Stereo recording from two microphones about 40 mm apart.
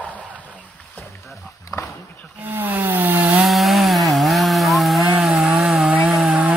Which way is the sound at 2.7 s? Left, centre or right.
Right.